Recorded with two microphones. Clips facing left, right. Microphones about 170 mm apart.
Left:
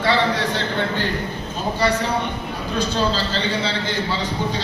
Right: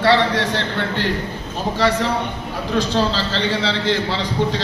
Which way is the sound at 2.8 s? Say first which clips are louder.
Right 1 dB; 90° right.